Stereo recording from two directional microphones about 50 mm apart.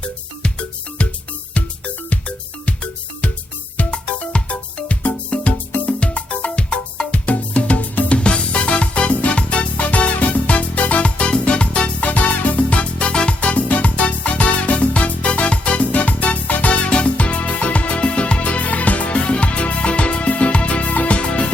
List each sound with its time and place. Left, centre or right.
1.5 s music: left